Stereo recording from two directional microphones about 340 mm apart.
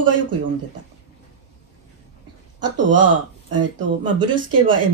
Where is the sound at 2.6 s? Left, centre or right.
Right.